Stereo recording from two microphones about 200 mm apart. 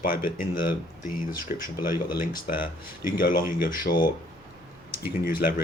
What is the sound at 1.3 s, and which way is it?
Speech, 45° left (ahead or behind).